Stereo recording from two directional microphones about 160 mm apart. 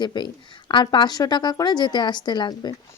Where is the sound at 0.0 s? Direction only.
25° left (ahead or behind).